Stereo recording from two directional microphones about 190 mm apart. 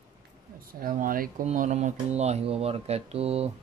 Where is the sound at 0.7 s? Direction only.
45° right (ahead or behind).